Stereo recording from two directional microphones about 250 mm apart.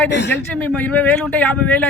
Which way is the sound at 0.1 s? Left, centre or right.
Left.